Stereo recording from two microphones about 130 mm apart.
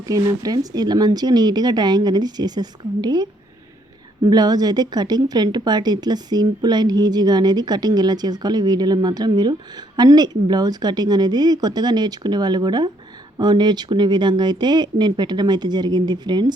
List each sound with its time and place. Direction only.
0.1 s a woman's voice: 30° right (ahead or behind)